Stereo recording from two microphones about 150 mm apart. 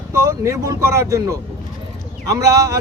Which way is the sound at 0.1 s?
20° right (ahead or behind).